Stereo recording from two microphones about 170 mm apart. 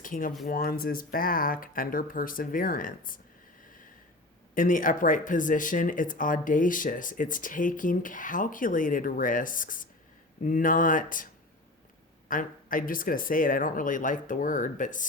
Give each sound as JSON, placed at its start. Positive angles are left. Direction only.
{"t": 0.0, "sound": "speech", "side_deg": 55}
{"t": 4.5, "sound": "speech", "side_deg": 50}
{"t": 12.3, "sound": "speech", "side_deg": 55}